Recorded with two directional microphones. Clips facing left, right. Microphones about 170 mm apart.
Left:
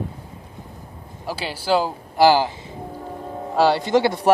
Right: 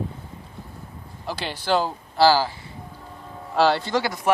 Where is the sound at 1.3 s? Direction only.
10° left (ahead or behind).